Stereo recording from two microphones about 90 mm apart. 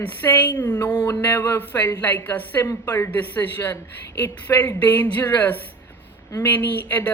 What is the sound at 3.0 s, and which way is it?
Speech, 20° left (ahead or behind).